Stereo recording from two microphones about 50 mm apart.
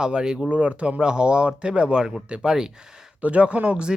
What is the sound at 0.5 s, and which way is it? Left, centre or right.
Speech, right.